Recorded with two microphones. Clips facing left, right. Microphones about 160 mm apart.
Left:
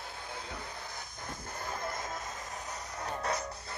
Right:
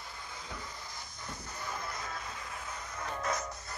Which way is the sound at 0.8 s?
55° left (ahead or behind).